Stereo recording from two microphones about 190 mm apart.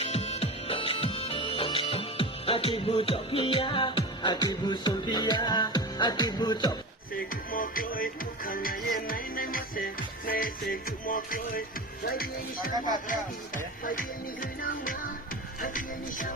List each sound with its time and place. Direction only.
0.0 s music: 35° left (ahead or behind)
7.1 s music: 50° left (ahead or behind)
12.0 s speech: 50° left (ahead or behind)
12.7 s speech: 20° right (ahead or behind)
14.4 s music: 45° left (ahead or behind)
15.6 s speech: 45° left (ahead or behind)